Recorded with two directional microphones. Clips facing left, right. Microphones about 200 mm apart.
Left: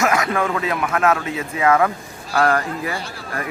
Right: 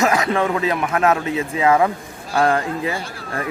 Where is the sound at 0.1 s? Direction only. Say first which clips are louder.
Right 1 dB; 30° right (ahead or behind).